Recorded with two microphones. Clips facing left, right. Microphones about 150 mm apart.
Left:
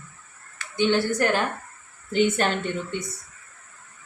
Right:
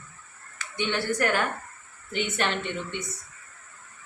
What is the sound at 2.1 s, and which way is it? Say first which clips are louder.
Speech: left 6 dB; 40° left (ahead or behind).